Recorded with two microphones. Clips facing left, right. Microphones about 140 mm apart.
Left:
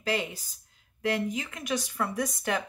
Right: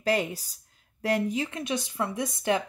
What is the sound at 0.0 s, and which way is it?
Speech, 40° right (ahead or behind).